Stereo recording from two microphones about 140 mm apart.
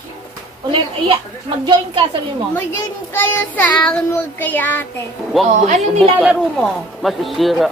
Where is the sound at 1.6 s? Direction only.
35° right (ahead or behind).